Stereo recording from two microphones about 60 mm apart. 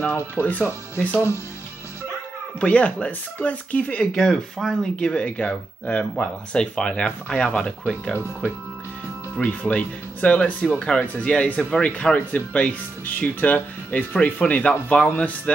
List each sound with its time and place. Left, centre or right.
0.4 s speech: left
2.6 s speech: left
4.1 s speech: centre
4.9 s speech: centre
9.4 s speech: left